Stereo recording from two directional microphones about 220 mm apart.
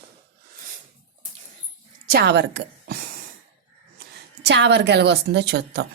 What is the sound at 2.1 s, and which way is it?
Speech, 50° right (ahead or behind).